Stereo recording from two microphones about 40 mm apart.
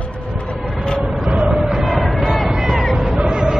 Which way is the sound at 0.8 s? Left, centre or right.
Left.